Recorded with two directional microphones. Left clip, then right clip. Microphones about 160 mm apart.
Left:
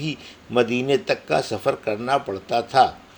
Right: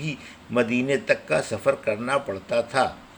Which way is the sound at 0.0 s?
25° left (ahead or behind).